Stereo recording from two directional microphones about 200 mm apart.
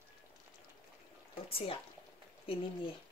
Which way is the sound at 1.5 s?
30° left (ahead or behind).